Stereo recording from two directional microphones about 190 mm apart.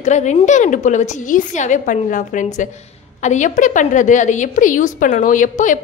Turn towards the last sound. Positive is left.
turn(degrees=45)  # may be behind; listen again after turning